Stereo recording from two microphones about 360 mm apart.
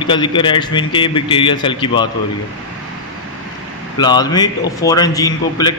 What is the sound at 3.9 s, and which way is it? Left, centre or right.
A man's voice, centre.